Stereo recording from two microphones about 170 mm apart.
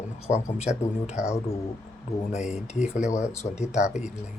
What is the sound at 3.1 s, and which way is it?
Speech, 15° left (ahead or behind).